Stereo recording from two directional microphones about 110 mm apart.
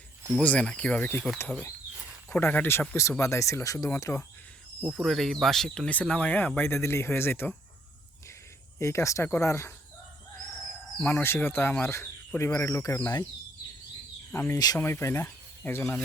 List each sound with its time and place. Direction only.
0.3 s speech: 10° left (ahead or behind)
4.8 s speech: 10° right (ahead or behind); by 7.5 s 20° left (ahead or behind)
8.8 s speech: 25° left (ahead or behind)
11.0 s speech: 20° left (ahead or behind)
14.3 s speech: 25° left (ahead or behind)